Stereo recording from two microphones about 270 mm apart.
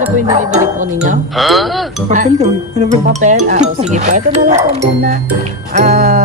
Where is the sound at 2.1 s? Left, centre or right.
Right.